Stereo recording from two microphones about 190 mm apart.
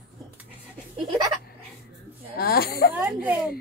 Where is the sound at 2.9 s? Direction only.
10° right (ahead or behind).